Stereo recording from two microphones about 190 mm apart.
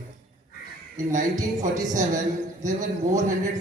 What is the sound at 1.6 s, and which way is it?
A man's voice, 40° right (ahead or behind).